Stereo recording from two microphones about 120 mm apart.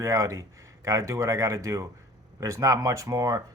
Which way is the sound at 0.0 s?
25° right (ahead or behind).